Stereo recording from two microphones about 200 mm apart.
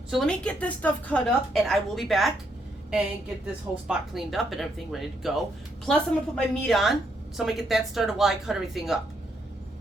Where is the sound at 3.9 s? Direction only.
Centre (ahead or behind).